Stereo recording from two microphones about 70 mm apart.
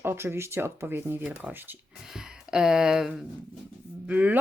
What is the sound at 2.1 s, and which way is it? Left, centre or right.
Speech, centre.